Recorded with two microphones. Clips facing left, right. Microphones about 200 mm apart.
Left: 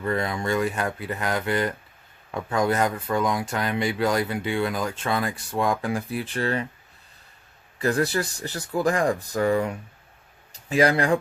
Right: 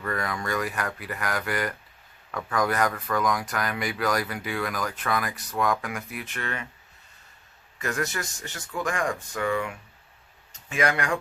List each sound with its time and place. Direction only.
0.0 s speech: 25° left (ahead or behind)
7.8 s speech: 35° left (ahead or behind)